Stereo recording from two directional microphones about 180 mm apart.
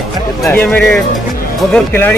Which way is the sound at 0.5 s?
10° left (ahead or behind).